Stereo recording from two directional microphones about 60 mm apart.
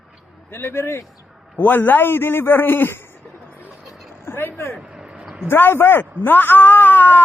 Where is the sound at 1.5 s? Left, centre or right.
Left.